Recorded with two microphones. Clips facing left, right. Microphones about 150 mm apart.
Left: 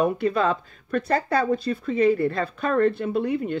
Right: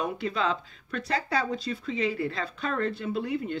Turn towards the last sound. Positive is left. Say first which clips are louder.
# left 5 dB
turn(degrees=50)  # may be behind; listen again after turning